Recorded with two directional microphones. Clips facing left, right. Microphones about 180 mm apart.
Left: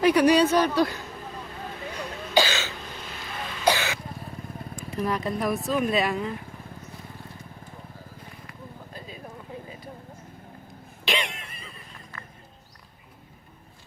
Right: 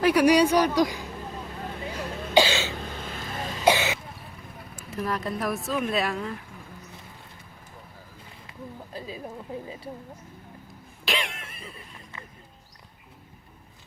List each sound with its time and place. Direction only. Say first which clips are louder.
0.0 s speech: even; 10° right (ahead or behind)
2.3 s cough: right 2 dB; 30° right (ahead or behind)
3.0 s vehicle: right 2 dB; 45° right (ahead or behind)
3.6 s cough: right 2 dB; 20° right (ahead or behind)
4.9 s speech: left 2 dB; centre (ahead or behind)
8.4 s a sound: right 6 dB; 30° right (ahead or behind)
11.0 s cough: left 1 dB; centre (ahead or behind)